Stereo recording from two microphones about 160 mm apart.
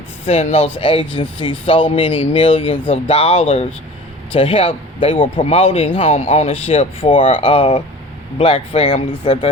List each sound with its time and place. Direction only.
0.3 s speech: 40° left (ahead or behind)